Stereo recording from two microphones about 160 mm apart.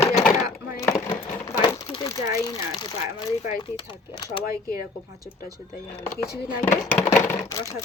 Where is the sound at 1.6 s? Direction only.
25° left (ahead or behind).